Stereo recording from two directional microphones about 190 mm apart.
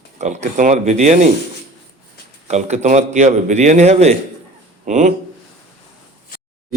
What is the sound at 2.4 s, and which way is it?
A man's voice, 35° right (ahead or behind).